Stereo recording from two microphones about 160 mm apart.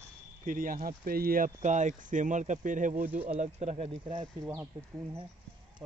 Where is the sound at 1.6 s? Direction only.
50° right (ahead or behind).